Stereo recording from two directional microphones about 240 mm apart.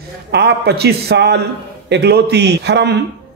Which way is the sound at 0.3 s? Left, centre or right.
Right.